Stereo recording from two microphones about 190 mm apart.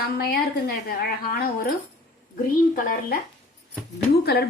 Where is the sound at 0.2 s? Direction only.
55° left (ahead or behind).